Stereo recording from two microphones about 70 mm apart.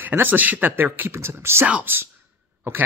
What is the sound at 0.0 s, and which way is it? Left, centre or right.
Speech, right.